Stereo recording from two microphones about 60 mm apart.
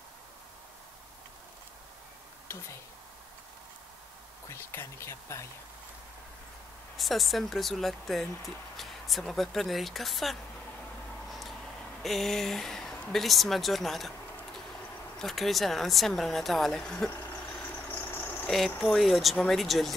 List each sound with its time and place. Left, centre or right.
4.5 s speech: left
7.0 s speech: centre
11.2 s a sound: centre
13.1 s speech: centre
15.1 s speech: centre
17.6 s vehicle: left
18.9 s speech: centre